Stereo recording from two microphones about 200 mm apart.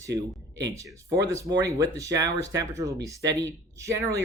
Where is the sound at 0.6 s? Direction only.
15° right (ahead or behind).